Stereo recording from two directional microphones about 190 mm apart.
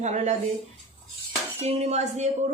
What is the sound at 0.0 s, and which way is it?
Speech, 35° right (ahead or behind).